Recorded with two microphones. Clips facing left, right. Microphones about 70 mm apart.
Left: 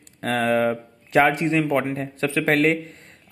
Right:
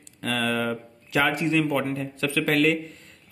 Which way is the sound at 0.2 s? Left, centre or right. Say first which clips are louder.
Left 5 dB; left.